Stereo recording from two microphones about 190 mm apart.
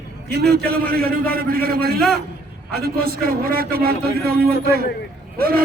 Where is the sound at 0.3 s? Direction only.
55° right (ahead or behind).